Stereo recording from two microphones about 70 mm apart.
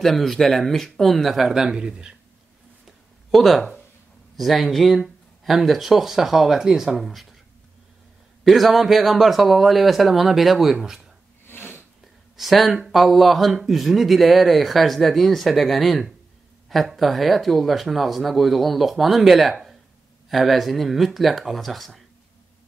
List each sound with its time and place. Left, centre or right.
0.0 s speech: centre
3.3 s speech: centre
8.5 s speech: centre
11.4 s a sound: left
12.4 s speech: centre
19.5 s a sound: centre
20.2 s speech: centre